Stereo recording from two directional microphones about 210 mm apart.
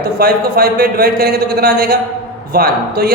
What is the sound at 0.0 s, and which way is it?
A man's voice, 45° right (ahead or behind).